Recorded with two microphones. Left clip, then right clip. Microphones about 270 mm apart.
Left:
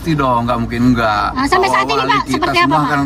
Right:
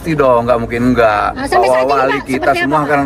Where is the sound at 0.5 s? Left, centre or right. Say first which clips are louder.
Right 3 dB; left.